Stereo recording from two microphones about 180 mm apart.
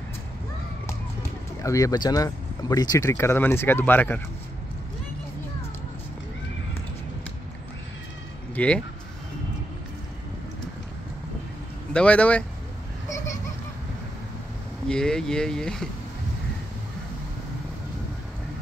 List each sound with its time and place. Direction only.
1.6 s speech: 20° left (ahead or behind)
8.5 s speech: 5° left (ahead or behind)
11.9 s speech: 5° left (ahead or behind)
14.9 s speech: 5° left (ahead or behind)